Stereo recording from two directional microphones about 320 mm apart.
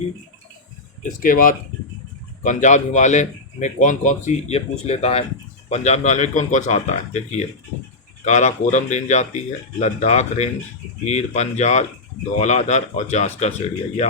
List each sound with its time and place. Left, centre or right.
1.0 s speech: left